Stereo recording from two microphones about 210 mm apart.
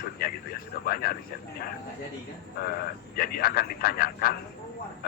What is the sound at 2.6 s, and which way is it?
Speech, 45° left (ahead or behind).